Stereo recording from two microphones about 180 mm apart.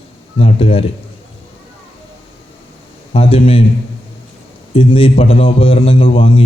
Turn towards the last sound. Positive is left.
turn(degrees=30)  # may be behind; listen again after turning